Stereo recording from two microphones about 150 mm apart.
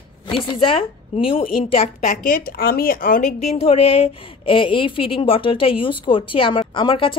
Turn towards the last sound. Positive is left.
turn(degrees=35)  # may be behind; listen again after turning